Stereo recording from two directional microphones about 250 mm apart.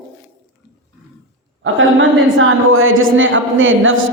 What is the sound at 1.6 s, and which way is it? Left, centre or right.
A woman's voice, right.